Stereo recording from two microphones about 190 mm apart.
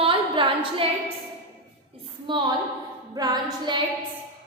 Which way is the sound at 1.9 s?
30° right (ahead or behind).